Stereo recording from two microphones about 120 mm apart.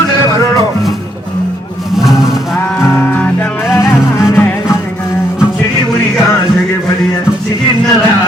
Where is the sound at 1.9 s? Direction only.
Centre (ahead or behind).